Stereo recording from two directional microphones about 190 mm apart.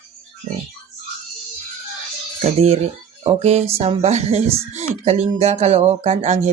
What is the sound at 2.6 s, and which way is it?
Speech, 35° right (ahead or behind).